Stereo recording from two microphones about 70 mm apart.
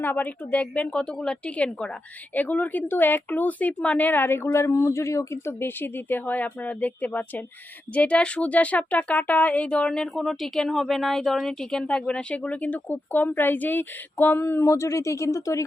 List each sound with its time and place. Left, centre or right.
0.0 s speech: left